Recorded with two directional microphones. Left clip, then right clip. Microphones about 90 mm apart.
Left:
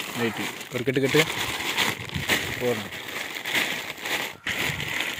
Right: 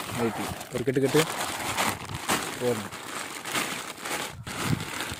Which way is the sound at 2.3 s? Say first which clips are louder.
Left 2 dB; 25° right (ahead or behind).